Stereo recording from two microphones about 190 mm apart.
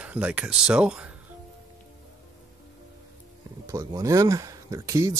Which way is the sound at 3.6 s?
15° right (ahead or behind).